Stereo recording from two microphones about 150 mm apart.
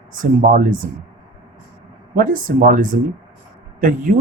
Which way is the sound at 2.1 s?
65° right (ahead or behind).